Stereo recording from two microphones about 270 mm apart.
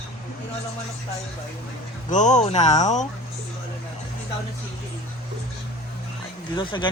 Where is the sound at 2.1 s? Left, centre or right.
Left.